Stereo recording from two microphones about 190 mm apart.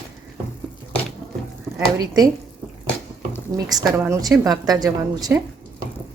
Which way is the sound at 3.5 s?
20° right (ahead or behind).